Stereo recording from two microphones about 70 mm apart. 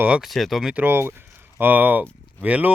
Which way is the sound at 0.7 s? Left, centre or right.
Right.